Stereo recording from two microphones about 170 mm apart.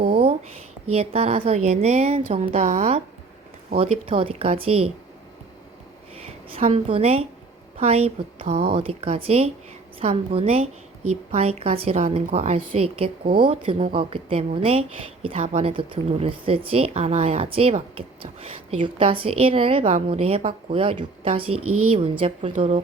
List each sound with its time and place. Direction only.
0.1 s a sound: 35° right (ahead or behind)
0.9 s a woman's voice: 35° right (ahead or behind)
6.1 s a woman's voice: 35° right (ahead or behind)